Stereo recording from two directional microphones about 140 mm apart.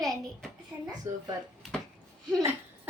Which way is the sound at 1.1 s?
20° right (ahead or behind).